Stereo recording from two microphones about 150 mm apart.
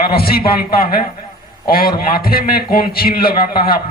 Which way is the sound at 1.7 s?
85° left.